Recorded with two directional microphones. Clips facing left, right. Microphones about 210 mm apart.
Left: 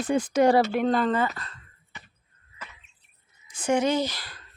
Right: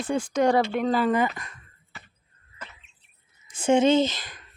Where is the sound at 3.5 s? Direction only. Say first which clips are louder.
Right 4 dB; 25° right (ahead or behind).